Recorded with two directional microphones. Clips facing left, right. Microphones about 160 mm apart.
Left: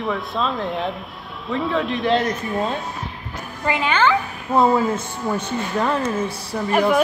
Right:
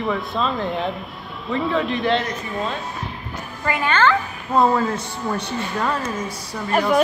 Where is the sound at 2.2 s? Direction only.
45° left (ahead or behind).